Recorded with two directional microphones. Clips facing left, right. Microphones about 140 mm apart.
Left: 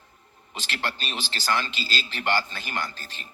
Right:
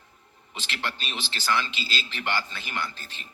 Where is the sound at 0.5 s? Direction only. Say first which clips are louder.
Left 2 dB; 40° left (ahead or behind).